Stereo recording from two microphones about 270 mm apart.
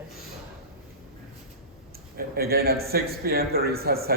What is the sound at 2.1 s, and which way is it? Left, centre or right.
A man's voice, right.